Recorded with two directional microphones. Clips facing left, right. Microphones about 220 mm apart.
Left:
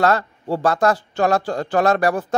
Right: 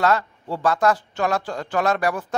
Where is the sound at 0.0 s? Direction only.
35° left (ahead or behind).